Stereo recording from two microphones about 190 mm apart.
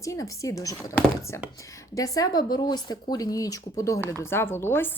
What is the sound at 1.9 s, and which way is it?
Speech, 20° left (ahead or behind).